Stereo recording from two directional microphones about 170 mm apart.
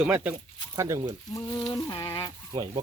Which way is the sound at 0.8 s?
20° right (ahead or behind).